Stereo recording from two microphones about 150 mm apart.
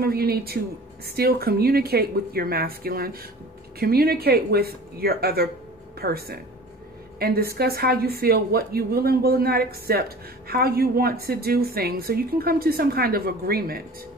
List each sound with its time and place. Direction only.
0.0 s a woman's voice: 90° right